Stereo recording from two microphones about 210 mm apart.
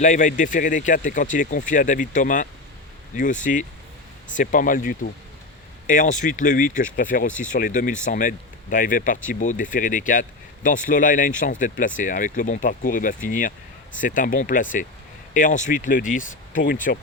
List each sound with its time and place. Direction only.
0.0 s speech: 35° left (ahead or behind)